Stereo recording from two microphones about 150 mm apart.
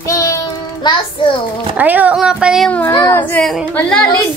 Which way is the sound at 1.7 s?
10° right (ahead or behind).